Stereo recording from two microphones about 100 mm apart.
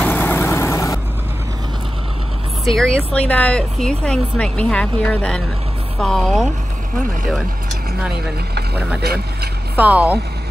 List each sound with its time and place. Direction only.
0.0 s vehicle: 20° left (ahead or behind)
2.6 s speech: 5° left (ahead or behind)
9.8 s speech: 15° right (ahead or behind)